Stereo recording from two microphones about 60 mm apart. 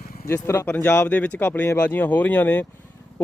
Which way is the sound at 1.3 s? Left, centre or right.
Left.